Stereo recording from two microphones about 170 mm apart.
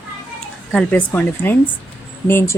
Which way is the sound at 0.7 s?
5° left (ahead or behind).